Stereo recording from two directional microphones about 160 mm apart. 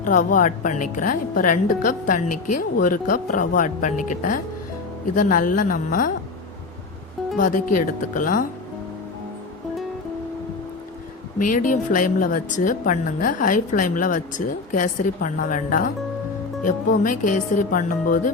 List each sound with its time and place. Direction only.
0.0 s a woman's voice: 55° left (ahead or behind)
7.3 s a woman's voice: 55° left (ahead or behind)
11.3 s a woman's voice: 55° left (ahead or behind)